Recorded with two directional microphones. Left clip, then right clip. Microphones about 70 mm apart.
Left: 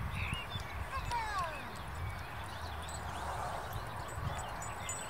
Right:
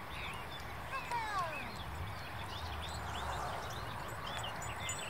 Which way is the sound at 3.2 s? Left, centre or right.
Left.